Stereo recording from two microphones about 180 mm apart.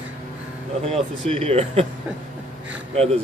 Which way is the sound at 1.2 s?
35° right (ahead or behind).